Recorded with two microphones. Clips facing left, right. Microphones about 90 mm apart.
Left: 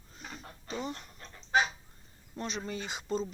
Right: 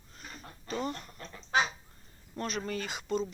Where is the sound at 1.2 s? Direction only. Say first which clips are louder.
Left 1 dB; 90° right.